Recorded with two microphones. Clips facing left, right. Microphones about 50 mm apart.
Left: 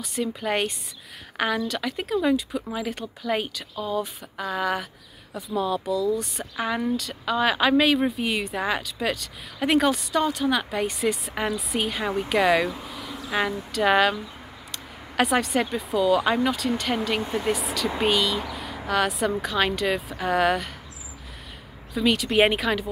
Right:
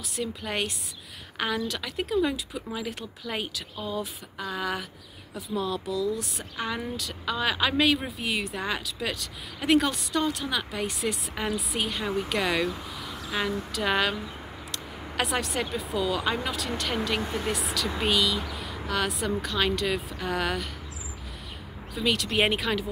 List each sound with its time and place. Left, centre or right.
0.0 s a woman's voice: centre
13.3 s speech: centre
13.6 s a woman's voice: centre
21.9 s a woman's voice: centre